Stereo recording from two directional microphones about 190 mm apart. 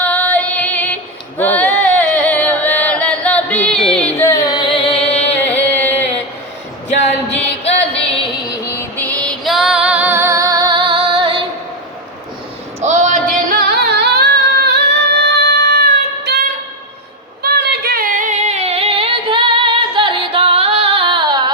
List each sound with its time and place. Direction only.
0.0 s music: 10° left (ahead or behind)
1.4 s singing: 10° left (ahead or behind)
3.8 s carnatic music: 5° left (ahead or behind); by 5.3 s 30° left (ahead or behind)
5.4 s chant: 10° left (ahead or behind)
7.6 s music: 30° left (ahead or behind)
9.0 s female singing: 10° left (ahead or behind); by 11.4 s 25° right (ahead or behind)
12.8 s singing: 40° right (ahead or behind); by 15.4 s 60° right (ahead or behind)
17.4 s female singing: 55° right (ahead or behind); by 21.5 s 25° right (ahead or behind)